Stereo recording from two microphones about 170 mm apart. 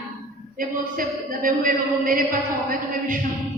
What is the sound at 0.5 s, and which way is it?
A man's voice, 55° right (ahead or behind).